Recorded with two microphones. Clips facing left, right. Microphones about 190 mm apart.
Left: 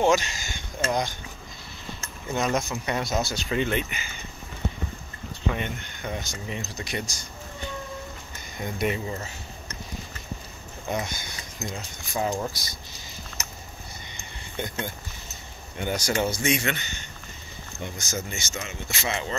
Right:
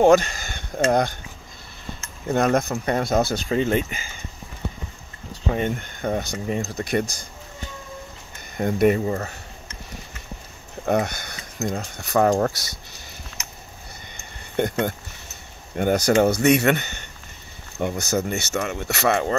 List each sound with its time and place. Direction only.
0.0 s speech: 55° right (ahead or behind)
2.2 s speech: 55° right (ahead or behind)
3.4 s speech: 35° right (ahead or behind)
5.3 s speech: 40° right (ahead or behind)
8.5 s speech: 55° right (ahead or behind)
10.9 s speech: 60° right (ahead or behind)
14.6 s speech: 60° right (ahead or behind)